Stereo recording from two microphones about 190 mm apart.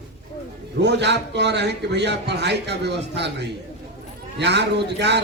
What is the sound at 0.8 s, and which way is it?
A man's voice, 65° right (ahead or behind).